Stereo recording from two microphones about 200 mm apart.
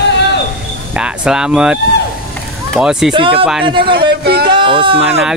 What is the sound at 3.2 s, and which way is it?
Speech, 25° right (ahead or behind).